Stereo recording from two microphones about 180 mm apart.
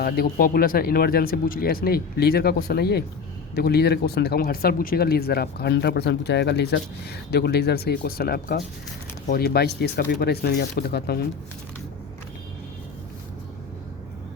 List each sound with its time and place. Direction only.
0.0 s speech: 55° left (ahead or behind)